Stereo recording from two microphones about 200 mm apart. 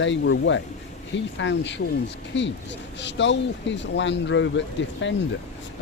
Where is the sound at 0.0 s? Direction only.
65° left (ahead or behind).